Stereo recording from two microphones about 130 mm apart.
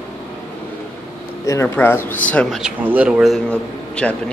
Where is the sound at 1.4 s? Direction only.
25° left (ahead or behind).